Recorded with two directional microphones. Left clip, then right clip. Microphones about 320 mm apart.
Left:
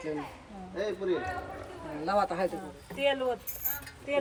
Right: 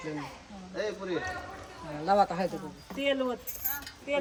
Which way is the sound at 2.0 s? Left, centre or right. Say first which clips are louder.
Right 3 dB; centre.